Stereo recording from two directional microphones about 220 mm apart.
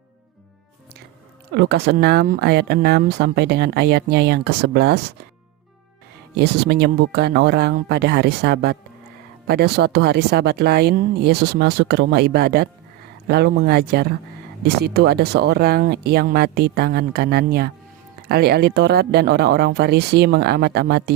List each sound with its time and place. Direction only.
1.5 s speech: 50° right (ahead or behind)
6.3 s speech: 45° right (ahead or behind)